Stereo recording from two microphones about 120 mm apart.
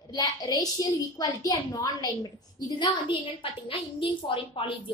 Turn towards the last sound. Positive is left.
turn(degrees=45)  # may be behind; listen again after turning